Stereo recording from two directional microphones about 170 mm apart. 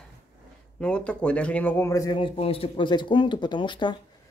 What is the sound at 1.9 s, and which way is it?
Speech, 20° left (ahead or behind).